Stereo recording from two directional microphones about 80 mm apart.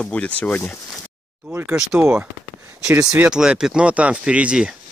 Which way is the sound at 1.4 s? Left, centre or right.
Right.